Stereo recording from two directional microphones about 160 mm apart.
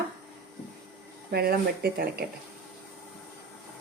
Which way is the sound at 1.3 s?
75° right (ahead or behind).